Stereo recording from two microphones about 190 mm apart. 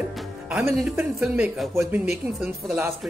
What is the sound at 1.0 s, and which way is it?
Speech, 5° right (ahead or behind).